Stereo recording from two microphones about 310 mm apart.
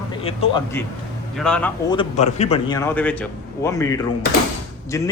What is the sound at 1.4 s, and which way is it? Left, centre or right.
Speech, centre.